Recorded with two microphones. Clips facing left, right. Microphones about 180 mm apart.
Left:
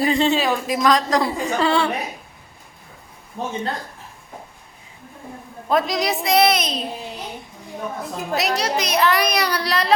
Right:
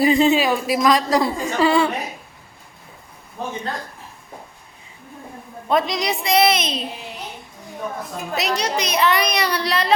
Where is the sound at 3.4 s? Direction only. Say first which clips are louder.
Left 1 dB; 30° left (ahead or behind).